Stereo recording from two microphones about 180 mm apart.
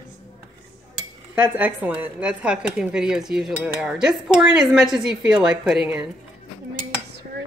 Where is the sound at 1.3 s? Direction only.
10° right (ahead or behind).